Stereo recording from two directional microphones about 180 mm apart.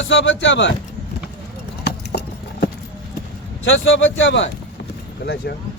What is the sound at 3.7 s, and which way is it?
Speech, 90° left.